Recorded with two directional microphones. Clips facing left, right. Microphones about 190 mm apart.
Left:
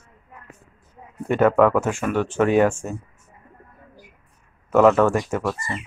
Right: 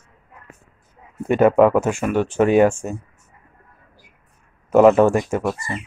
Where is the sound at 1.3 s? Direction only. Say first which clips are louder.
Right 3 dB; 15° right (ahead or behind).